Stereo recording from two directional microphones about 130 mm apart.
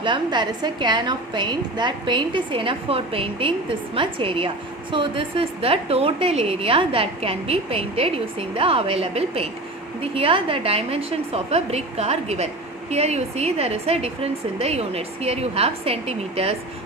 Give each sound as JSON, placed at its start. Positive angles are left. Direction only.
{"t": 0.0, "sound": "a woman's voice", "side_deg": -35}